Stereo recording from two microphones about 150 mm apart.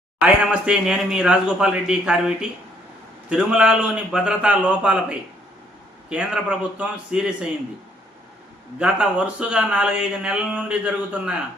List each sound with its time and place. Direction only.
0.2 s speech: 5° right (ahead or behind)
8.8 s speech: 5° right (ahead or behind)